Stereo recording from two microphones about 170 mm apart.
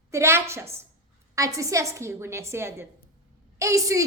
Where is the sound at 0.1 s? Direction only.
15° right (ahead or behind).